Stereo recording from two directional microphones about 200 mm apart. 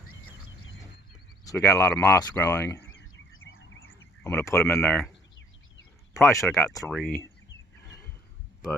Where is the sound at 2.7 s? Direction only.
70° left (ahead or behind).